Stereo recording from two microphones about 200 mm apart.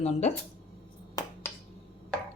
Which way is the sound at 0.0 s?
35° left (ahead or behind).